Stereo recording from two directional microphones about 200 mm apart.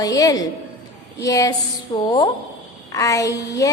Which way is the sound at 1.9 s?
20° left (ahead or behind).